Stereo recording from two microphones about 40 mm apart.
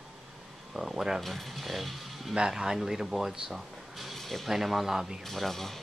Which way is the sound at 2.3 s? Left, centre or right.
Centre.